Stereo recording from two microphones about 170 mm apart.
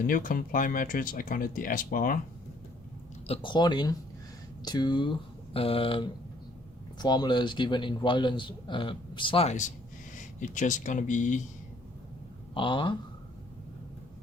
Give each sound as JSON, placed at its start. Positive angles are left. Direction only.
{"t": 0.1, "sound": "speech", "side_deg": 55}
{"t": 3.2, "sound": "a man's voice", "side_deg": 30}
{"t": 12.5, "sound": "a man's voice", "side_deg": 30}